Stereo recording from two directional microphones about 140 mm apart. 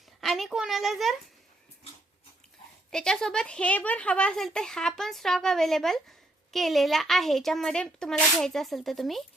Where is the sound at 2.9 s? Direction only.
5° left (ahead or behind).